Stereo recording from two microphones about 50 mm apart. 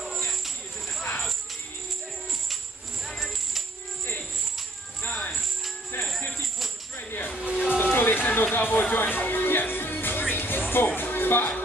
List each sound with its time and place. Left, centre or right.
3.2 s music: centre
5.3 s music: centre
5.9 s music: left
7.0 s tambourine: left
7.5 s music: centre
7.8 s music: left